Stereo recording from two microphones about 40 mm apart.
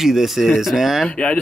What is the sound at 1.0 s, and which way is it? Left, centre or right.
Speech, left.